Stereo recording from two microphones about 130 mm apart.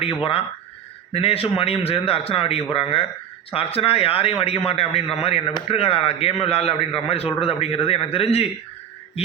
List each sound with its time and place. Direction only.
0.0 s speech: 45° left (ahead or behind)